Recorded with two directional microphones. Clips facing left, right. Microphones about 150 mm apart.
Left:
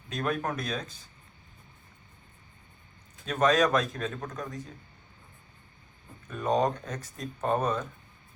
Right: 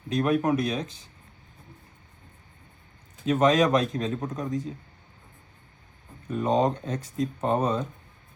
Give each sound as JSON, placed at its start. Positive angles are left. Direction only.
{"t": 0.2, "sound": "speech", "side_deg": -15}
{"t": 3.2, "sound": "speech", "side_deg": -15}
{"t": 3.8, "sound": "a man's voice", "side_deg": -25}
{"t": 6.3, "sound": "a man's voice", "side_deg": -25}